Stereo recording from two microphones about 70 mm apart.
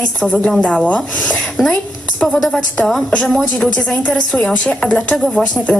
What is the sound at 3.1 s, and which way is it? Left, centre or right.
Speech, centre.